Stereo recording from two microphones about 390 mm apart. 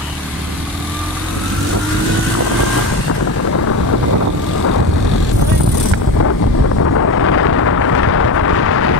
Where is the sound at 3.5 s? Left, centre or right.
Left.